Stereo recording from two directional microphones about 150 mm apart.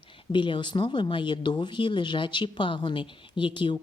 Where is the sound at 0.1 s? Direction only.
35° left (ahead or behind).